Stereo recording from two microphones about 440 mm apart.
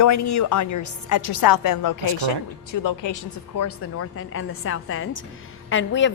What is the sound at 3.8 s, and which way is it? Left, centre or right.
A woman's voice, left.